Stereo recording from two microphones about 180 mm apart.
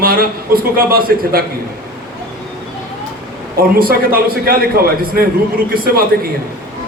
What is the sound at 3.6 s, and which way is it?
A man's voice, 55° right (ahead or behind).